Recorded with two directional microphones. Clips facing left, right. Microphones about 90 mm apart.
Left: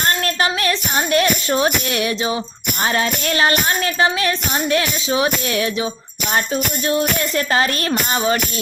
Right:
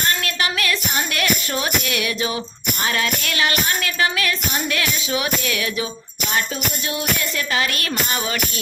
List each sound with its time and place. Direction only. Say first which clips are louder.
0.0 s music: left 4 dB; 35° left (ahead or behind)